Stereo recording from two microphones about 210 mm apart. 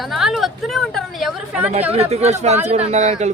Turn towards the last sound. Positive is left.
turn(degrees=-35)  # may be behind; listen again after turning